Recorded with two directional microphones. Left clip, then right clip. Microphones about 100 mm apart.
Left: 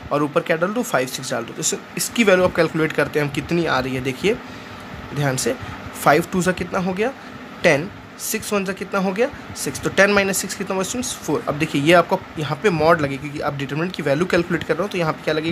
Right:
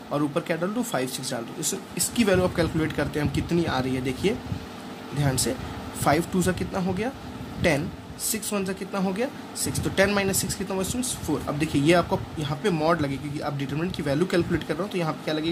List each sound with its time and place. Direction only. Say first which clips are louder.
0.1 s speech: left 7 dB; 70° left (ahead or behind)